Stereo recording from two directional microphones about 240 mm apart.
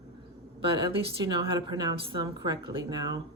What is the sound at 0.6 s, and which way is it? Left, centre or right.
A woman's voice, centre.